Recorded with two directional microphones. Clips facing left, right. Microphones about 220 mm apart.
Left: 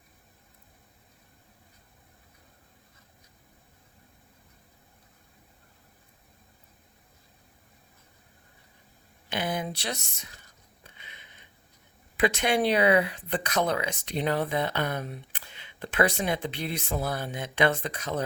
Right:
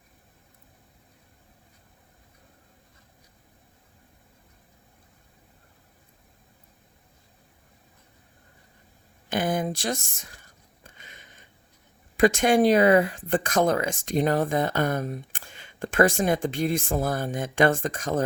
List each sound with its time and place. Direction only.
9.3 s speech: 50° right (ahead or behind)
10.8 s a sound: 45° right (ahead or behind)
12.1 s speech: 45° right (ahead or behind)